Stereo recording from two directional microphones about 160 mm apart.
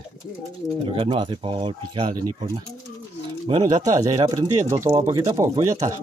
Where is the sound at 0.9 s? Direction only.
35° right (ahead or behind); by 5.7 s 20° right (ahead or behind).